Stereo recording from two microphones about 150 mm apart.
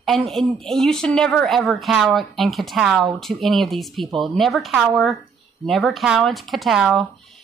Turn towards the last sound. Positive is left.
turn(degrees=0)  # may be behind; listen again after turning